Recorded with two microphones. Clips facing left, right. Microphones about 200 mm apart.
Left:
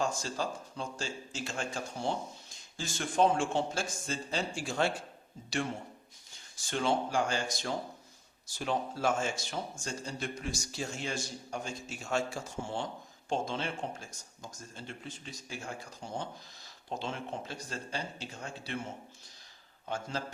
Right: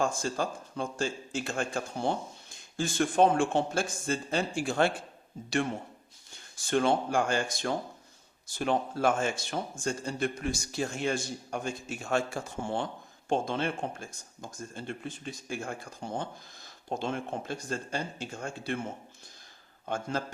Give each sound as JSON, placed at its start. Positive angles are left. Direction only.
{"t": 0.0, "sound": "speech", "side_deg": -55}
{"t": 6.7, "sound": "speech", "side_deg": -55}
{"t": 19.8, "sound": "a man's voice", "side_deg": -50}